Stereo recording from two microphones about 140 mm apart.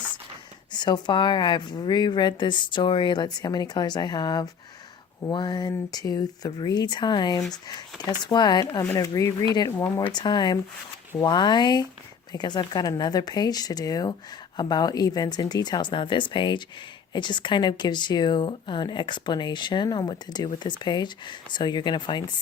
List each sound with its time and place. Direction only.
0.7 s speech: 30° left (ahead or behind)